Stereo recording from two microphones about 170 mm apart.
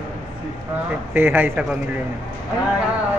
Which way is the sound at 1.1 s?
10° right (ahead or behind).